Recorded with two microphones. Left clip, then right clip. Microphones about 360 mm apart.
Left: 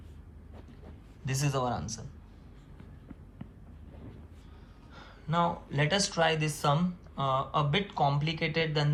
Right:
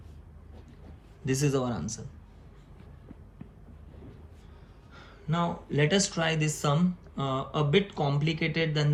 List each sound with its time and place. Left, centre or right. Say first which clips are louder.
1.2 s speech: right 3 dB; centre
4.9 s speech: left 2 dB; centre